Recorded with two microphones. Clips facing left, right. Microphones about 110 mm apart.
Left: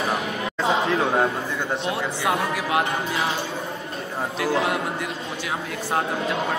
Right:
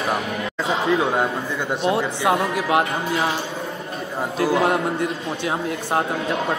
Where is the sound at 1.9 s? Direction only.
30° right (ahead or behind).